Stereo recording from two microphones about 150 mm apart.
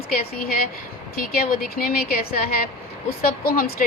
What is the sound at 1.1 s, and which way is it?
A woman's voice, 85° left.